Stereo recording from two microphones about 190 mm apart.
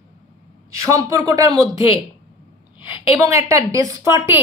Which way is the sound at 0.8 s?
20° right (ahead or behind).